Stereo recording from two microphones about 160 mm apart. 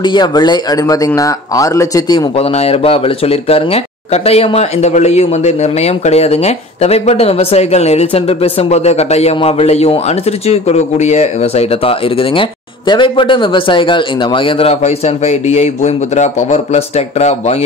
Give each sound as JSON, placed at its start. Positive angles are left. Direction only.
{"t": 0.0, "sound": "speech", "side_deg": 25}
{"t": 2.3, "sound": "speech", "side_deg": 40}